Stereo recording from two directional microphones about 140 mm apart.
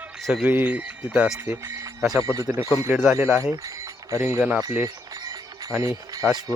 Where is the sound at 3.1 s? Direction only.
20° right (ahead or behind).